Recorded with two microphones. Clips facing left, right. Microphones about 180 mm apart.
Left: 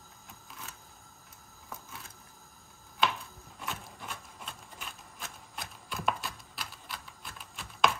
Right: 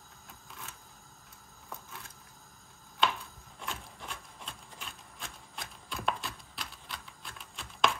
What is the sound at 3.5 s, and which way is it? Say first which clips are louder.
Printer: left 1 dB; 5° left (ahead or behind).